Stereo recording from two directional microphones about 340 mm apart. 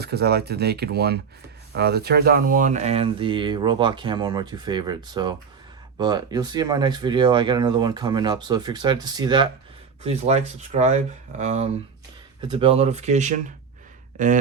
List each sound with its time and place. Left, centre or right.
0.0 s speech: right